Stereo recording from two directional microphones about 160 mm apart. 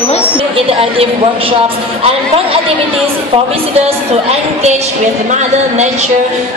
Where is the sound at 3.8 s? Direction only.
40° right (ahead or behind).